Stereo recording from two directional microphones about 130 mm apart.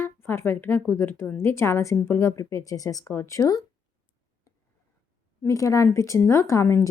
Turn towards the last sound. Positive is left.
turn(degrees=20)  # may be behind; listen again after turning